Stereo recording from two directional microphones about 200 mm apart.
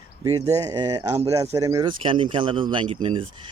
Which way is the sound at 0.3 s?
15° right (ahead or behind).